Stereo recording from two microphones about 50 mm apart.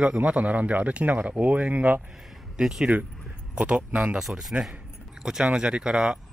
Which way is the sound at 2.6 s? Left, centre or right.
Centre.